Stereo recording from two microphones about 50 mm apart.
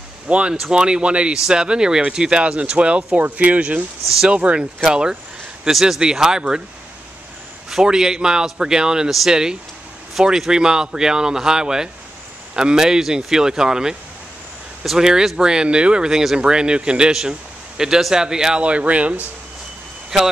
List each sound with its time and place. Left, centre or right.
0.3 s speech: right
3.2 s speech: right; by 6.6 s centre
7.7 s a man's voice: centre
18.6 s speech: right